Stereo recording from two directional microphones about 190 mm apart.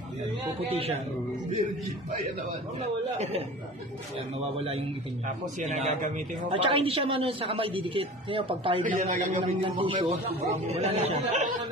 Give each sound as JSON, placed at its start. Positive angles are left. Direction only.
{"t": 0.7, "sound": "a man's voice", "side_deg": -30}
{"t": 3.2, "sound": "a man's voice", "side_deg": -35}
{"t": 4.6, "sound": "a man's voice", "side_deg": -30}
{"t": 6.5, "sound": "a man's voice", "side_deg": -30}
{"t": 8.8, "sound": "a man's voice", "side_deg": -40}